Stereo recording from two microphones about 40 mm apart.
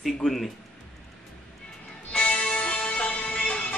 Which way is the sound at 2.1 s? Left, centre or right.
Left.